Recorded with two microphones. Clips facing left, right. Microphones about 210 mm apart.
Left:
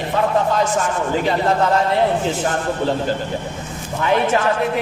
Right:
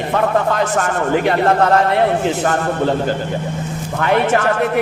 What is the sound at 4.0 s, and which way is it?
Speech, 65° right (ahead or behind).